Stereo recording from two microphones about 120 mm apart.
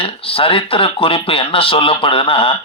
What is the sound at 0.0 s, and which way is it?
Speech, 50° left (ahead or behind).